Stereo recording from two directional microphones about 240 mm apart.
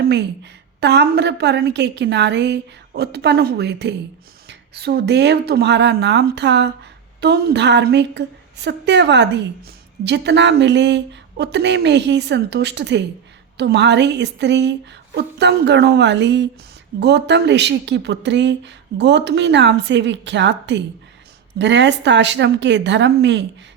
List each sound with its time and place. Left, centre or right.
0.0 s a woman's voice: right